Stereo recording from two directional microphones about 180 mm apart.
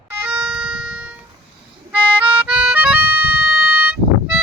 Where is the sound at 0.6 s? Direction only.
5° right (ahead or behind).